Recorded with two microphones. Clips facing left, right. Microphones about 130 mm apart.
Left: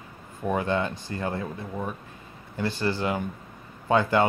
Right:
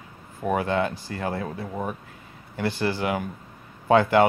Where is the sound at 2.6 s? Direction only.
15° right (ahead or behind).